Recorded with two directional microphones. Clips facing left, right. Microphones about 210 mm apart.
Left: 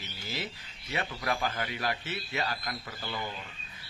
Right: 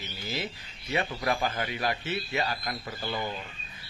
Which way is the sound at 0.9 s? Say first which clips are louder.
Right 4 dB; 20° right (ahead or behind).